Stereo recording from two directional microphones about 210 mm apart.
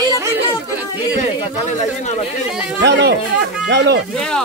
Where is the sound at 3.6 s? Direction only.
55° right (ahead or behind).